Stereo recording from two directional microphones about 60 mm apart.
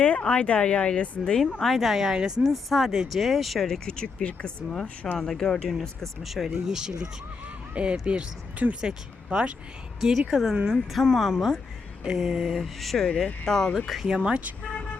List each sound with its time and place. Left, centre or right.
0.0 s speech: centre
1.6 s speech: centre
3.8 s speech: centre
14.3 s speech: centre
14.6 s vehicle: centre